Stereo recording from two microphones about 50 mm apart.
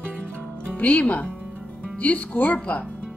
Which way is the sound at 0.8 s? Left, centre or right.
Left.